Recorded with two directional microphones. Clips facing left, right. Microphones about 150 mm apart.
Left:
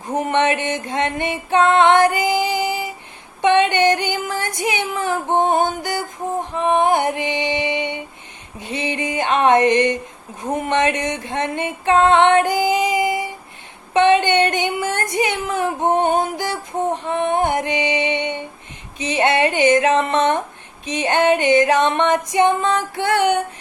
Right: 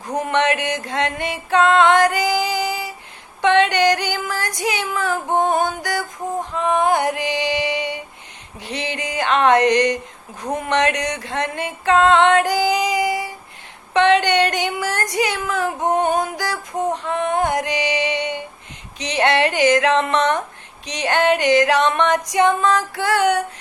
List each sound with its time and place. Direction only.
0.0 s music: 20° left (ahead or behind)